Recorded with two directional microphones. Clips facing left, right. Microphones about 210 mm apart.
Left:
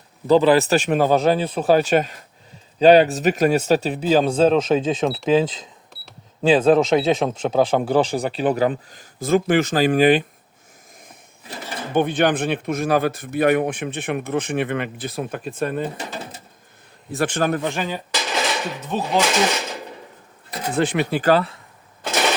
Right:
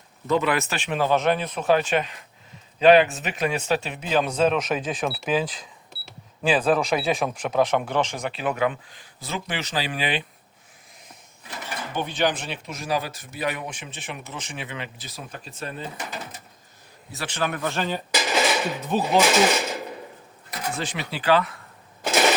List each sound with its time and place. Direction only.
0.3 s speech: 35° left (ahead or behind)
11.4 s drawer open or close: 30° left (ahead or behind)
11.9 s speech: 55° left (ahead or behind)
17.1 s speech: 50° left (ahead or behind)
17.6 s dishes: 15° left (ahead or behind)
17.8 s speech: centre (ahead or behind)
20.7 s speech: 60° left (ahead or behind)
22.0 s a sound: 5° right (ahead or behind)